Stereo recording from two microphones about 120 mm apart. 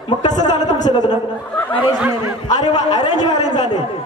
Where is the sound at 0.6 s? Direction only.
85° left.